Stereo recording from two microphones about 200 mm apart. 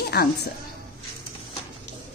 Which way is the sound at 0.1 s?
55° left (ahead or behind).